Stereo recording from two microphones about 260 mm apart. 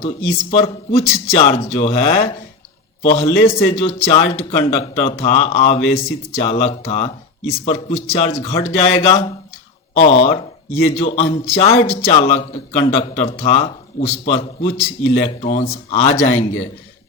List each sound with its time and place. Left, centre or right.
0.0 s a man's voice: left